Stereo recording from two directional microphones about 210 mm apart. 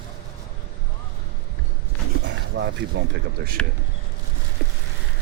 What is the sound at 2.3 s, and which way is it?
Dog, 55° right (ahead or behind).